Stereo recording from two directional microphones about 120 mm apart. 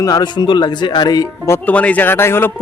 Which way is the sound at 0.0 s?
35° left (ahead or behind).